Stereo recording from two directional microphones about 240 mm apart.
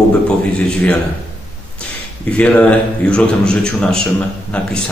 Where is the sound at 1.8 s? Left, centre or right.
Centre.